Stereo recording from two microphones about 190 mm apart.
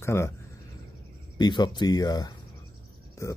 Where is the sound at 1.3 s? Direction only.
20° left (ahead or behind).